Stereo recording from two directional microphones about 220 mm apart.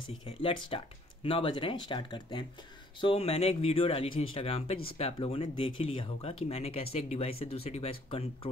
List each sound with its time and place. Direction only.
0.4 s speech: 25° left (ahead or behind)